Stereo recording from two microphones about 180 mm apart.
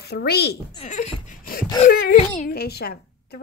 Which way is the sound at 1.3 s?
50° left (ahead or behind).